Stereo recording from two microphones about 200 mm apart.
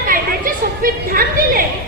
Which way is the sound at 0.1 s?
45° right (ahead or behind).